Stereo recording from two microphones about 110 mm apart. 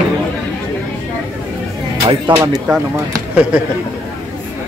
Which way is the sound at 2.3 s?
30° right (ahead or behind).